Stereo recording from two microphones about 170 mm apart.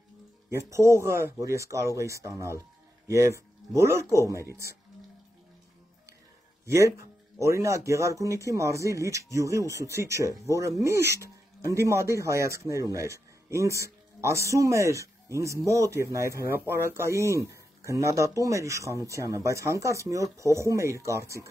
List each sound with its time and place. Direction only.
0.5 s speech: 15° right (ahead or behind)
6.6 s speech: 15° right (ahead or behind)